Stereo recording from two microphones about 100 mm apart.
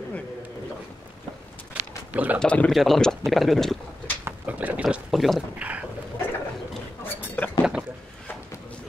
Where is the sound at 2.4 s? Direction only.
10° left (ahead or behind).